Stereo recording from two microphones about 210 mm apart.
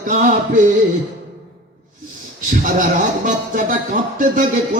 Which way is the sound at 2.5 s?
40° right (ahead or behind).